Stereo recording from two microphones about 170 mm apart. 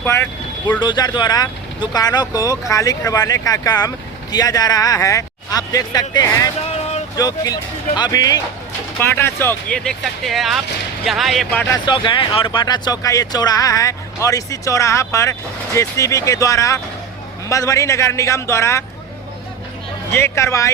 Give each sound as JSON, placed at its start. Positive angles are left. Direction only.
{"t": 0.0, "sound": "speech", "side_deg": 15}
{"t": 0.8, "sound": "speech", "side_deg": 25}
{"t": 11.7, "sound": "a man's voice", "side_deg": 30}
{"t": 20.1, "sound": "a man's voice", "side_deg": 15}